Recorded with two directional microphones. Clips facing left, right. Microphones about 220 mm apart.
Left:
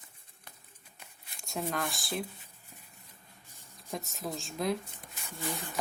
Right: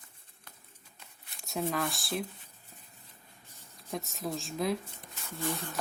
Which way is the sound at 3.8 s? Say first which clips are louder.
Right 1 dB; centre (ahead or behind).